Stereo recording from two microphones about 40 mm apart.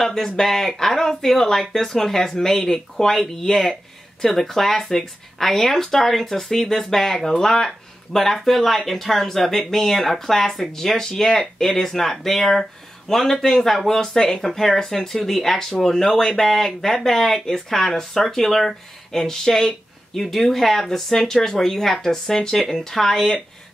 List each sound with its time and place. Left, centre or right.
0.0 s speech: centre